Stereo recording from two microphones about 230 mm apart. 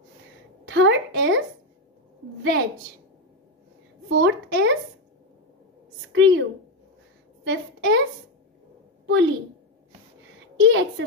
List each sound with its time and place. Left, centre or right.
0.7 s a woman's voice: right
4.1 s a woman's voice: right
6.1 s a woman's voice: right
7.4 s a woman's voice: right
9.0 s a sound: right
10.6 s a woman's voice: right